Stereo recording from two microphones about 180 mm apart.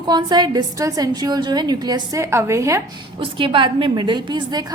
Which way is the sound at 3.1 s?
30° right (ahead or behind).